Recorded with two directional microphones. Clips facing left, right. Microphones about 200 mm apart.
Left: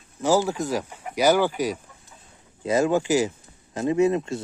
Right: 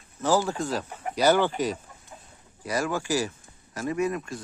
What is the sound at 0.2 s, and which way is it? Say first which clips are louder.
Speech: left 3 dB; 15° left (ahead or behind).